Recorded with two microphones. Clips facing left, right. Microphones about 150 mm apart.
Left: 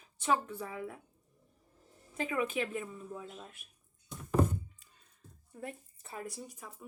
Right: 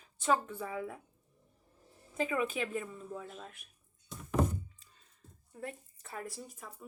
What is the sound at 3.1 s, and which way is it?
Speech, 20° left (ahead or behind).